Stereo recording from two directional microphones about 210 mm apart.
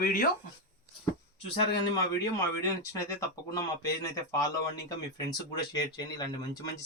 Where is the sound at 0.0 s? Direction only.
45° left (ahead or behind).